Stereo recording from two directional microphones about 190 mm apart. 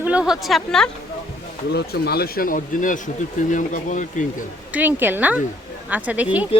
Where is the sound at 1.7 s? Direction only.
55° left (ahead or behind).